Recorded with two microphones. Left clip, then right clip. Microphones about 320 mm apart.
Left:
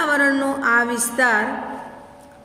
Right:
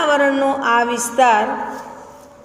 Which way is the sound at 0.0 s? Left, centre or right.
Right.